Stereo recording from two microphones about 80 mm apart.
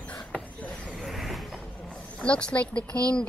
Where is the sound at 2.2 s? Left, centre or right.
Centre.